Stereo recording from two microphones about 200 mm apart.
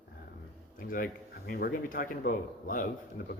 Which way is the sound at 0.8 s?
45° left (ahead or behind).